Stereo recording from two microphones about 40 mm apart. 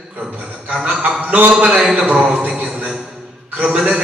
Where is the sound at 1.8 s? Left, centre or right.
Centre.